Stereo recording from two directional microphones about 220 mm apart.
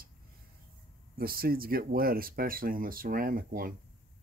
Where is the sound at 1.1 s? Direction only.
40° right (ahead or behind).